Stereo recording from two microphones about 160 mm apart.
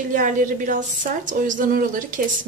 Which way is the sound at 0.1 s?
55° right (ahead or behind).